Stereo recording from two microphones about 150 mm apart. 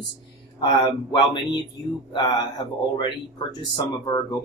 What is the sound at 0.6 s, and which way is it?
Speech, 30° left (ahead or behind).